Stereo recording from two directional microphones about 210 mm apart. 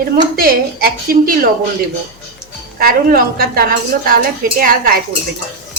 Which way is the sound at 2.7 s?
45° right (ahead or behind).